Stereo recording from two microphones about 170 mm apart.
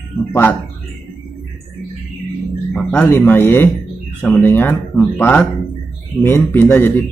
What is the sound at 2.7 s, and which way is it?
Speech, 10° left (ahead or behind).